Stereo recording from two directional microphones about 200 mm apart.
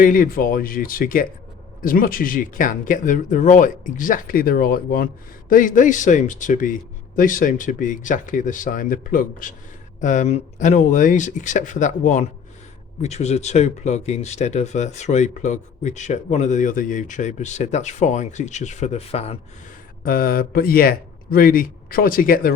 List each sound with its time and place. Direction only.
0.0 s speech: 45° left (ahead or behind)
20.1 s speech: 45° left (ahead or behind)